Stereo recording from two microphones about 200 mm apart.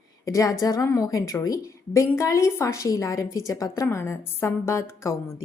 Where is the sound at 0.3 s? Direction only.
15° left (ahead or behind).